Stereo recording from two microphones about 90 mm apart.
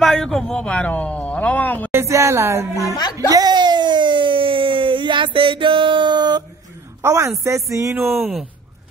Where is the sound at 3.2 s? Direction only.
50° right (ahead or behind).